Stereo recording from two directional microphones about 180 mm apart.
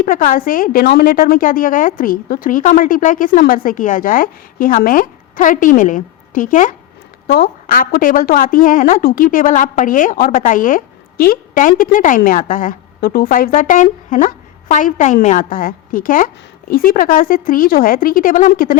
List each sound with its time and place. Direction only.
0.0 s a woman's voice: 50° left (ahead or behind)
7.3 s a woman's voice: 60° left (ahead or behind)